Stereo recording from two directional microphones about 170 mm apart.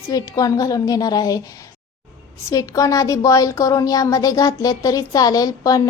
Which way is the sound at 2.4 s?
20° left (ahead or behind).